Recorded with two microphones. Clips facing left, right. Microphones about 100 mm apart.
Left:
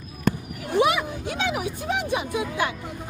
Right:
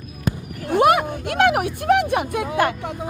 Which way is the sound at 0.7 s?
55° right (ahead or behind).